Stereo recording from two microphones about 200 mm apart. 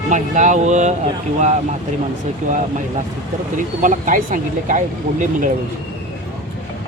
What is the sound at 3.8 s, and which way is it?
Speech, 40° right (ahead or behind).